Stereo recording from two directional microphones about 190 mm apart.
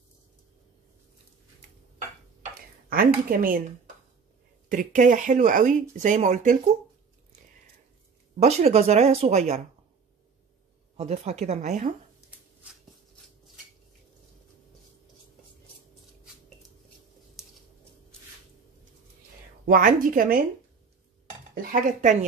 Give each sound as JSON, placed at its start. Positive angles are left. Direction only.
{"t": 2.9, "sound": "a woman's voice", "side_deg": -50}
{"t": 4.6, "sound": "speech", "side_deg": -45}
{"t": 8.4, "sound": "speech", "side_deg": -35}
{"t": 11.0, "sound": "speech", "side_deg": -35}
{"t": 17.4, "sound": "a sound", "side_deg": 0}
{"t": 19.6, "sound": "a woman's voice", "side_deg": -45}
{"t": 21.5, "sound": "speech", "side_deg": -40}